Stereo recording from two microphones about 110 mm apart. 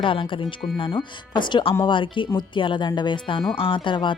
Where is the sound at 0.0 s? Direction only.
50° left (ahead or behind).